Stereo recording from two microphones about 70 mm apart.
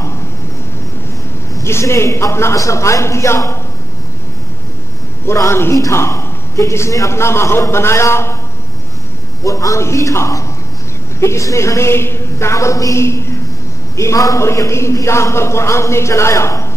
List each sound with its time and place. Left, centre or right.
1.5 s a man's voice: left
5.5 s a man's voice: left
9.4 s a man's voice: left